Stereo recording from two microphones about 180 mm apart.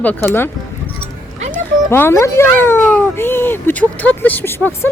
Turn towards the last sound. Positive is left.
turn(degrees=15)  # may be behind; listen again after turning